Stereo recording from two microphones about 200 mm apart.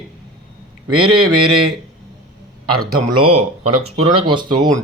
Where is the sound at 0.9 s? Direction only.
90° right.